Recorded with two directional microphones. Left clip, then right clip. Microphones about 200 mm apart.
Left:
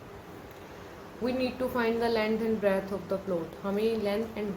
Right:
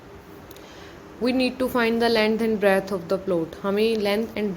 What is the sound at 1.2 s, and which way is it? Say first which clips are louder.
Speech: right 7 dB; 50° right (ahead or behind).